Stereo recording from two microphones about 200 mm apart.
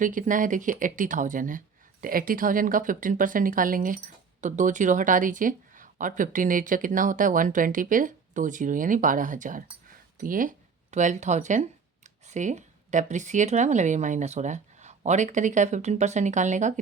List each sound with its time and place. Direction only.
0.0 s speech: 40° right (ahead or behind)